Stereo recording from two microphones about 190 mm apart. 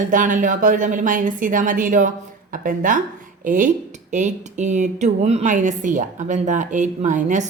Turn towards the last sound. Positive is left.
turn(degrees=-40)  # may be behind; listen again after turning